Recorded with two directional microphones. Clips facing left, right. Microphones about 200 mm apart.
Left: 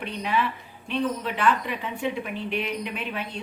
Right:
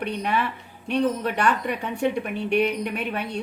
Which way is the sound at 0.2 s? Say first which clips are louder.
Right 1 dB; 50° right (ahead or behind).